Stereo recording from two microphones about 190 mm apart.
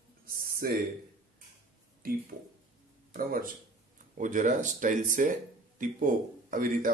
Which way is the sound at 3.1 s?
50° right (ahead or behind).